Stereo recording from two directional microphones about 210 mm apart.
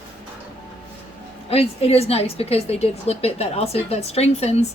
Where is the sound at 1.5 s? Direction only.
30° left (ahead or behind).